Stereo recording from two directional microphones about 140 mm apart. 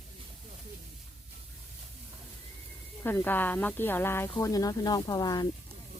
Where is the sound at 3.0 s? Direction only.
15° left (ahead or behind); by 5.5 s 30° left (ahead or behind).